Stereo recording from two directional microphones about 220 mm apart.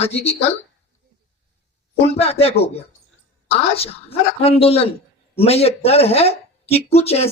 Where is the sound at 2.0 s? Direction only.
25° left (ahead or behind).